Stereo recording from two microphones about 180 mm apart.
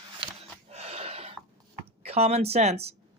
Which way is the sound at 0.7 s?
35° right (ahead or behind).